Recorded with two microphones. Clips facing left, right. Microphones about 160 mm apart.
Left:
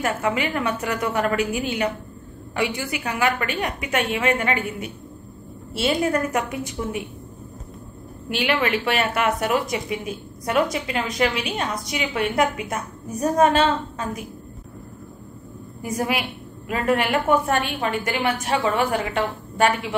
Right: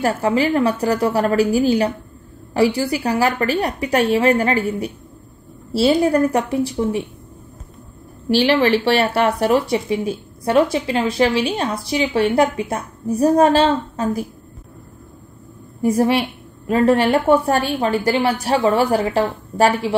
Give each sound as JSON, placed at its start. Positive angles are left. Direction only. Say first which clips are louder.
{"t": 0.0, "sound": "speech", "louder": "right 6 dB", "side_deg": -35}
{"t": 8.3, "sound": "speech", "louder": "right 8 dB", "side_deg": -30}
{"t": 15.8, "sound": "speech", "louder": "right 9 dB", "side_deg": -30}